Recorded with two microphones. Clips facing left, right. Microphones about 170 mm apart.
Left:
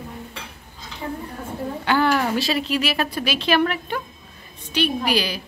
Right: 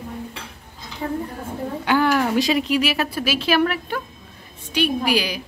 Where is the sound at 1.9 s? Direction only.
10° right (ahead or behind).